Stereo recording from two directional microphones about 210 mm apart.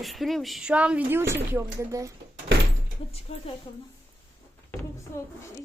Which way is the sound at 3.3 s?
25° left (ahead or behind).